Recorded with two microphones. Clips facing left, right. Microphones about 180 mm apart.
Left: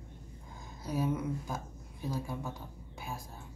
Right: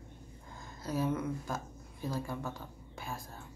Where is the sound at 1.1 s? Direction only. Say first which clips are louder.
Even; 15° left (ahead or behind).